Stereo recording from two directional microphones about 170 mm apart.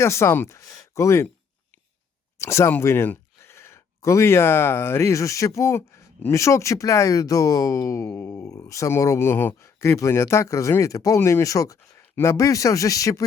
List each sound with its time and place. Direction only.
0.0 s speech: 15° left (ahead or behind)
2.4 s speech: 15° left (ahead or behind)